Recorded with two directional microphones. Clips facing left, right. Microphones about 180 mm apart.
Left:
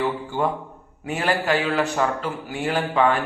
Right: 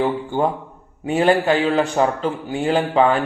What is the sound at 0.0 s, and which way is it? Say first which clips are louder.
A man's voice: right 4 dB; 30° right (ahead or behind).